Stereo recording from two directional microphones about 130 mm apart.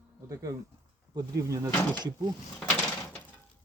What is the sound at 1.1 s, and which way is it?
Speech, 25° right (ahead or behind).